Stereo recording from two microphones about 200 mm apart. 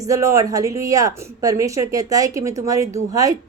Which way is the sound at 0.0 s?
15° right (ahead or behind).